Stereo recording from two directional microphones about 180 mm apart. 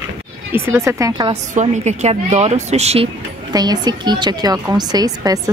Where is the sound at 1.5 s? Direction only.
40° right (ahead or behind).